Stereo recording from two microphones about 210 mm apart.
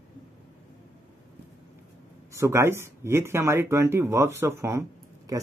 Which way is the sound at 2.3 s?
15° right (ahead or behind).